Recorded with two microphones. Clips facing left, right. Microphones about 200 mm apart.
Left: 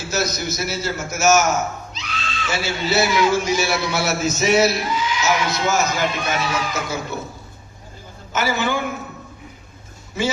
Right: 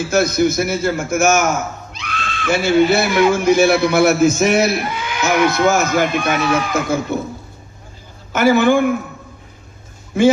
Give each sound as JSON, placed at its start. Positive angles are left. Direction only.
{"t": 0.0, "sound": "a man's voice", "side_deg": -55}
{"t": 8.3, "sound": "a man's voice", "side_deg": -55}
{"t": 10.2, "sound": "a man's voice", "side_deg": -55}